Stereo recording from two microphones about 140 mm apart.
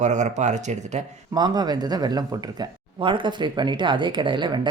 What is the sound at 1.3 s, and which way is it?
Speech, 30° right (ahead or behind).